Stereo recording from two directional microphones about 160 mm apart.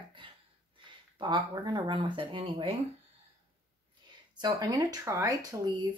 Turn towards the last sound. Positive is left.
turn(degrees=-25)  # may be behind; listen again after turning